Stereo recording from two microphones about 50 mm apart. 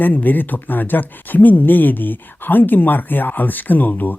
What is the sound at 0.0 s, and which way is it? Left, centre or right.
Speech, left.